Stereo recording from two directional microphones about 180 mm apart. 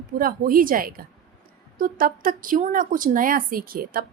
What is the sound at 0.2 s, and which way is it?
Speech, 50° right (ahead or behind).